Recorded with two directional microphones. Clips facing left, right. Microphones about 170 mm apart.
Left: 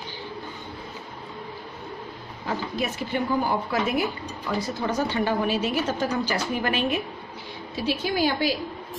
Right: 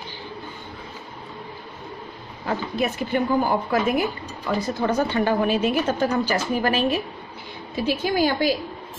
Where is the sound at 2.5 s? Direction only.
55° right (ahead or behind).